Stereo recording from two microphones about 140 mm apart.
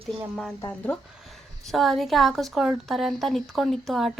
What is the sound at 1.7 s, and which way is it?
A woman's voice, centre (ahead or behind).